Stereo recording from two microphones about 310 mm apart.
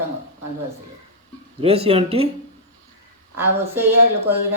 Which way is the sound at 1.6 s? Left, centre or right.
Centre.